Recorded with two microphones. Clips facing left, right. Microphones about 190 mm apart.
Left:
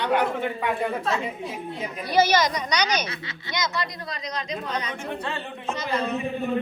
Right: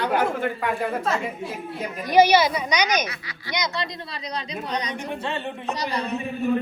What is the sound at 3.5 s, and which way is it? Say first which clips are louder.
Speech: right 1 dB; 20° right (ahead or behind).